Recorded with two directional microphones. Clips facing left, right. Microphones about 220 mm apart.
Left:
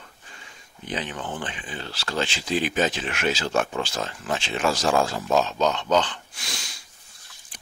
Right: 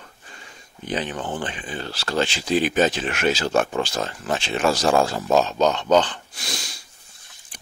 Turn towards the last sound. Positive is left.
turn(degrees=-35)  # may be behind; listen again after turning